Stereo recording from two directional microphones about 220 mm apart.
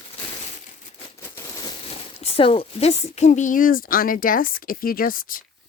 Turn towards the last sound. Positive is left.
turn(degrees=40)  # may be behind; listen again after turning